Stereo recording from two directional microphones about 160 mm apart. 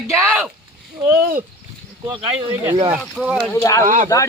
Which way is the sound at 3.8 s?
55° right (ahead or behind).